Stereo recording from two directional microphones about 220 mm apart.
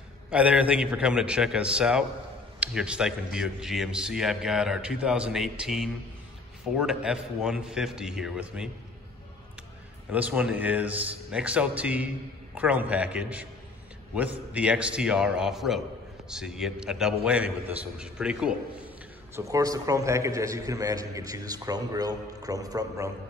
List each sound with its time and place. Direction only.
0.3 s a man's voice: 5° right (ahead or behind)
10.1 s a man's voice: 5° right (ahead or behind)
19.3 s a man's voice: 15° right (ahead or behind)